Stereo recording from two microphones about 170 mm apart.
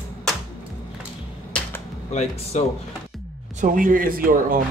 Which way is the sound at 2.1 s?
40° left (ahead or behind).